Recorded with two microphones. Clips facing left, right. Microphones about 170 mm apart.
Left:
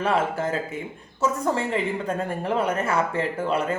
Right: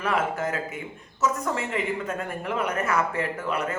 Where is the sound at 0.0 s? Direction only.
30° left (ahead or behind).